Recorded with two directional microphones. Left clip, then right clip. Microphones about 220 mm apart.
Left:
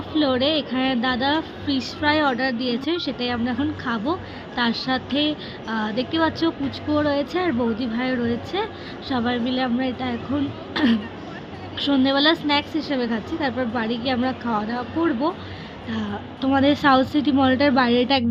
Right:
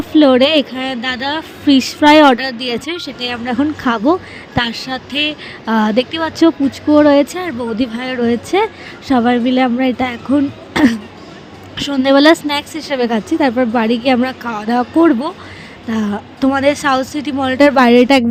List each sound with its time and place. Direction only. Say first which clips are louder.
0.2 s speech: right 11 dB; 40° right (ahead or behind)